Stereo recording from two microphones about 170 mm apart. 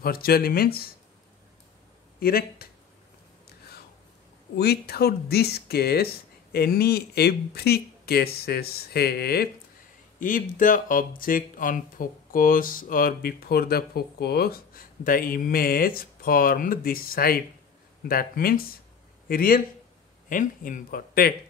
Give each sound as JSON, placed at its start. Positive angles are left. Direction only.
{"t": 0.0, "sound": "speech", "side_deg": 60}
{"t": 2.1, "sound": "speech", "side_deg": 60}
{"t": 3.4, "sound": "a sound", "side_deg": 65}
{"t": 4.6, "sound": "speech", "side_deg": 70}
{"t": 10.2, "sound": "speech", "side_deg": 50}